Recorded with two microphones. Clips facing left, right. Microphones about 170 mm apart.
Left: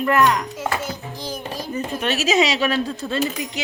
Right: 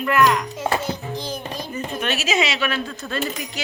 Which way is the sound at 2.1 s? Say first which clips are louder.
Left 5 dB; 35° left (ahead or behind).